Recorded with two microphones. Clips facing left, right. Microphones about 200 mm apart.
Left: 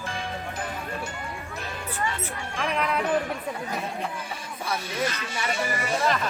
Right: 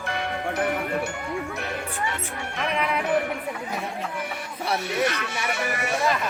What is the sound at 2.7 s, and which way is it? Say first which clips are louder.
Speech: right 1 dB; 10° right (ahead or behind).